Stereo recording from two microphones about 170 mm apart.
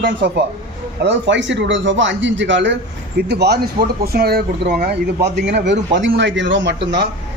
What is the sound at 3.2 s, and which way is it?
Speech, 75° right (ahead or behind).